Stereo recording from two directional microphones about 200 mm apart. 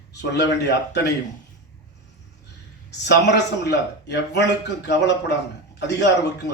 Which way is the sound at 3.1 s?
60° left (ahead or behind).